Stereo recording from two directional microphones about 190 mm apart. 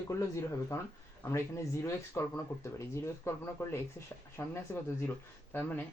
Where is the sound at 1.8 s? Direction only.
15° left (ahead or behind).